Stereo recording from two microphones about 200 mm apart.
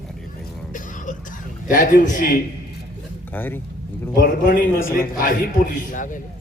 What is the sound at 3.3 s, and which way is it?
Speech, 10° left (ahead or behind).